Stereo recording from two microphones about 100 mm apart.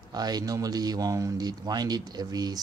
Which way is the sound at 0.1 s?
40° right (ahead or behind).